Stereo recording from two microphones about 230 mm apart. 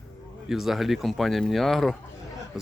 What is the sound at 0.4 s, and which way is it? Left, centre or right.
Speech, centre.